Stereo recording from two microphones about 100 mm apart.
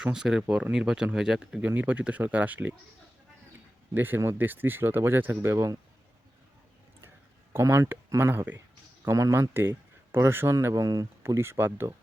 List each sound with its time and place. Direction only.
0.0 s speech: 5° right (ahead or behind)
1.6 s speech: 15° right (ahead or behind)
3.9 s speech: 20° right (ahead or behind)
7.5 s speech: 30° right (ahead or behind)
9.5 s speech: 20° right (ahead or behind)
10.8 s speech: 40° right (ahead or behind)
11.3 s speech: 25° right (ahead or behind)